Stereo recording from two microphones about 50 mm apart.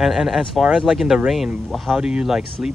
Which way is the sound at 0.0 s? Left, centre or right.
Centre.